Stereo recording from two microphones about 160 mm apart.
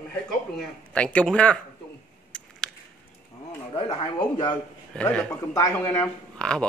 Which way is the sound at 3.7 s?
35° left (ahead or behind).